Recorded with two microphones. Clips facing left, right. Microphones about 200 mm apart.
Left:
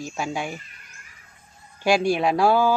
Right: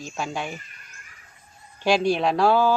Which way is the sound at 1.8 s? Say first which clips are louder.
Left 1 dB; 10° left (ahead or behind).